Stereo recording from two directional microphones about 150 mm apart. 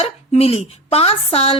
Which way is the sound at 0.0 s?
40° left (ahead or behind).